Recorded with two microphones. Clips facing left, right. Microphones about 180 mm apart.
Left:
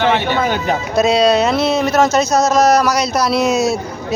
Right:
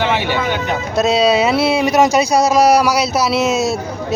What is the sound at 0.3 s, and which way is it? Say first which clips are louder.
Speech: left 2 dB; 45° left (ahead or behind).